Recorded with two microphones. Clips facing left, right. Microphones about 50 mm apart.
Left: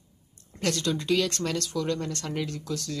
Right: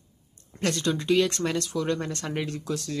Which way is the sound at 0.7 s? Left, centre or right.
Centre.